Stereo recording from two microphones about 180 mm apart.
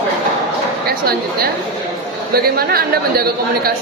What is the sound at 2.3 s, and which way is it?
Speech, 55° right (ahead or behind).